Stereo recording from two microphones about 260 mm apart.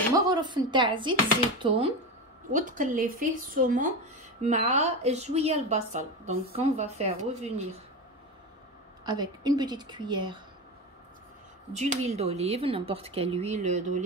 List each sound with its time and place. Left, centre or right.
0.2 s a woman's voice: centre
9.0 s a woman's voice: centre
11.7 s a woman's voice: right